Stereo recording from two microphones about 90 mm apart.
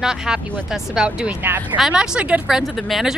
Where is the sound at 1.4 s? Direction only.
20° right (ahead or behind).